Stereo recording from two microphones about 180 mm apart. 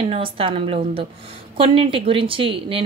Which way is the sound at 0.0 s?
30° right (ahead or behind).